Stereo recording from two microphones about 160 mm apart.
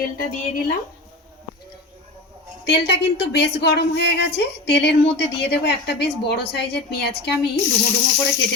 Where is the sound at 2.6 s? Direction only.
90° left.